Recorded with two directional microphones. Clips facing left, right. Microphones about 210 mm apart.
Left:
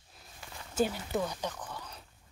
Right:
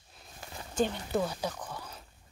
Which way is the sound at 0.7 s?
5° left (ahead or behind).